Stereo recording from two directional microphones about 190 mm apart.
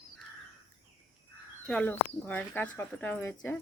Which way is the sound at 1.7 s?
10° left (ahead or behind).